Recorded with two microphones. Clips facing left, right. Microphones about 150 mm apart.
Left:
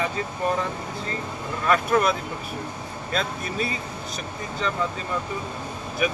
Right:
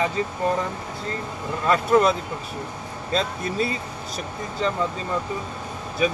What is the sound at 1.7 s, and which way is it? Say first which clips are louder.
Speech: right 3 dB; 25° right (ahead or behind).